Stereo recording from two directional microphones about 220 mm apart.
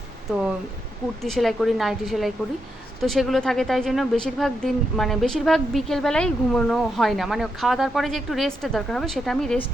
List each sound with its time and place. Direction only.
0.3 s speech: 5° right (ahead or behind)